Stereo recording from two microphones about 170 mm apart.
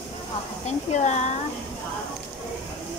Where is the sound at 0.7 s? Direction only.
45° left (ahead or behind).